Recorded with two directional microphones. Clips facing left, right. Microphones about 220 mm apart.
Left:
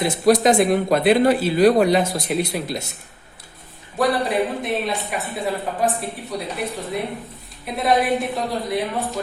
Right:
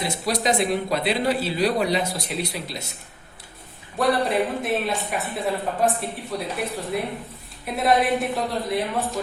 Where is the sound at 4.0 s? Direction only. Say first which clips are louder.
Left 1 dB; centre (ahead or behind).